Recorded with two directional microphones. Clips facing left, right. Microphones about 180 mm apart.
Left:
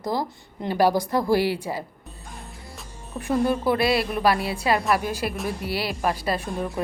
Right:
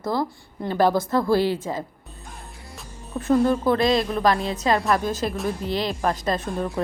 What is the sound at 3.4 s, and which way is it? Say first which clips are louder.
A woman's voice: right 2 dB; 10° left (ahead or behind).